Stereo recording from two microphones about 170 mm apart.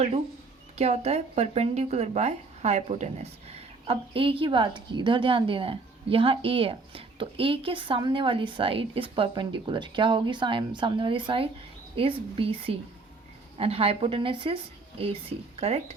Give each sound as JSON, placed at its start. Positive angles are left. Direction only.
{"t": 0.8, "sound": "speech", "side_deg": -40}